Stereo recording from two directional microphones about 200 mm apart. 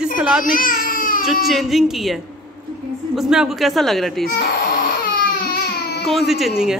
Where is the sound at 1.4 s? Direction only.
Centre (ahead or behind).